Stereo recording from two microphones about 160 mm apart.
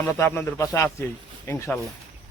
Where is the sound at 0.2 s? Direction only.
15° left (ahead or behind).